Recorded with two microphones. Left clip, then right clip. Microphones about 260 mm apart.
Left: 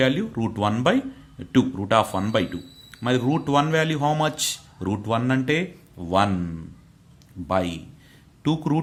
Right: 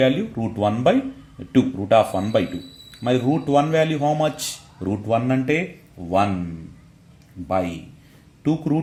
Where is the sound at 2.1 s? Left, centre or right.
Left.